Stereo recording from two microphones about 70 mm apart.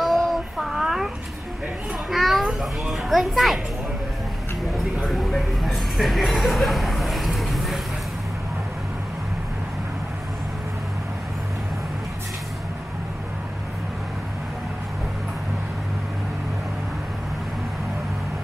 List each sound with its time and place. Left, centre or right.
0.0 s child singing: centre
2.0 s children playing: centre
5.0 s a sound: centre